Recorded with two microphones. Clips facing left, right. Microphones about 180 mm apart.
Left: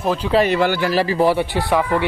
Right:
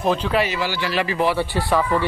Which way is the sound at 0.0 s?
5° left (ahead or behind).